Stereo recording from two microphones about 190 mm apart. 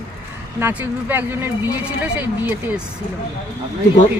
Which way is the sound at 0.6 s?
10° right (ahead or behind).